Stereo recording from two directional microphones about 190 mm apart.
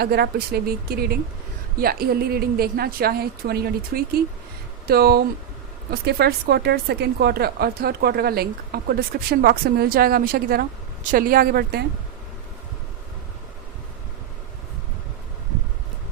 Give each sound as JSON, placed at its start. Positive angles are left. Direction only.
{"t": 0.0, "sound": "a woman's voice", "side_deg": -55}